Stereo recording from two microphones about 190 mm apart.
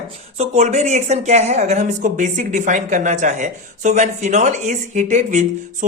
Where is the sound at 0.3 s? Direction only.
35° right (ahead or behind).